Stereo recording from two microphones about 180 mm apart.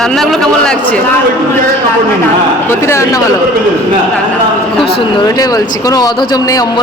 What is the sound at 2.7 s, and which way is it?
Speech, 15° left (ahead or behind).